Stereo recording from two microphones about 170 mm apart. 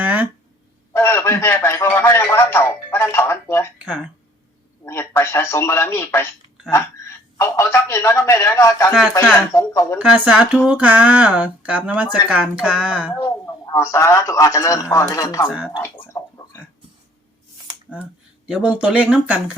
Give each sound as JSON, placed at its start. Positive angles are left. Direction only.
{"t": 0.0, "sound": "a sound", "side_deg": -10}
{"t": 0.9, "sound": "speech", "side_deg": 15}
{"t": 3.8, "sound": "speech", "side_deg": -5}
{"t": 4.9, "sound": "speech", "side_deg": 15}
{"t": 10.0, "sound": "speech", "side_deg": -5}
{"t": 13.1, "sound": "speech", "side_deg": 15}
{"t": 15.8, "sound": "a sound", "side_deg": 15}
{"t": 17.8, "sound": "speech", "side_deg": -5}